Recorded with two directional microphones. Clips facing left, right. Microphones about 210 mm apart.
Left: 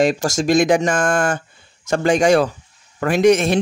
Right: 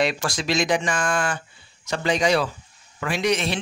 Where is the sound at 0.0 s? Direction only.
45° left (ahead or behind).